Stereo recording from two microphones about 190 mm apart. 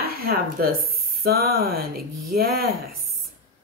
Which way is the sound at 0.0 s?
50° right (ahead or behind).